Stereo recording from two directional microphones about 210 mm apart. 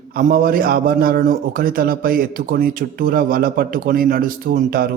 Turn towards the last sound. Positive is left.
turn(degrees=-40)  # may be behind; listen again after turning